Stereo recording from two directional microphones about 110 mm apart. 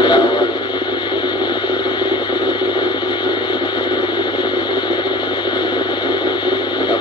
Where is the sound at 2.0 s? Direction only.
40° left (ahead or behind).